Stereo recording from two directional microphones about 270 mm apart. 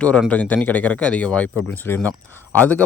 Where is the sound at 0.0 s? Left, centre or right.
Centre.